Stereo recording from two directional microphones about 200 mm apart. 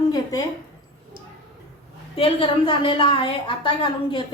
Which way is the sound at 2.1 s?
25° left (ahead or behind).